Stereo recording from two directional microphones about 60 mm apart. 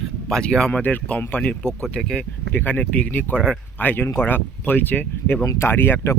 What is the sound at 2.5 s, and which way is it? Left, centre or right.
Speech, left.